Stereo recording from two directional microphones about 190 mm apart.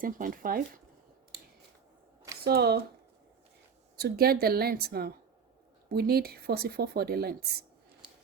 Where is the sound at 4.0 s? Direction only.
55° right (ahead or behind).